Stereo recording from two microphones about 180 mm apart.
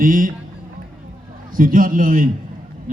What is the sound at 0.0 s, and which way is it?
Speech, 50° right (ahead or behind).